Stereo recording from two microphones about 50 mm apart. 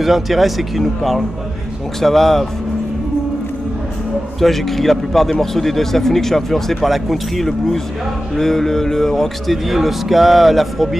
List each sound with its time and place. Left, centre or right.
0.0 s a man's voice: centre
4.4 s a man's voice: centre